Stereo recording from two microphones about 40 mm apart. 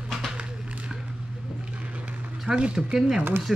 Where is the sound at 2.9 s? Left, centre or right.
Centre.